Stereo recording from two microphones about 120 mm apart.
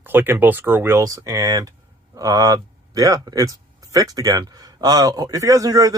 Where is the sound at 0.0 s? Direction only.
15° right (ahead or behind).